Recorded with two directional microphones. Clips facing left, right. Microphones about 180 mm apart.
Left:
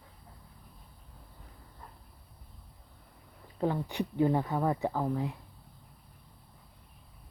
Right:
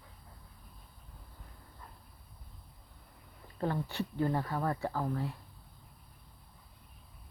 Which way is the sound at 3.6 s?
15° left (ahead or behind).